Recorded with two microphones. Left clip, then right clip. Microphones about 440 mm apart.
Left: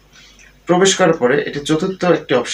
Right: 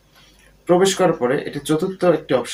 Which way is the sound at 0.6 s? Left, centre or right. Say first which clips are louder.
Left 3 dB; right.